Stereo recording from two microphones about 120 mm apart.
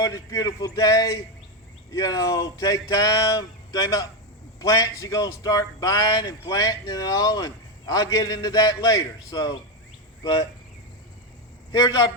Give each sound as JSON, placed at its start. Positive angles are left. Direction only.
{"t": 0.0, "sound": "a man's voice", "side_deg": 30}
{"t": 11.7, "sound": "a man's voice", "side_deg": 35}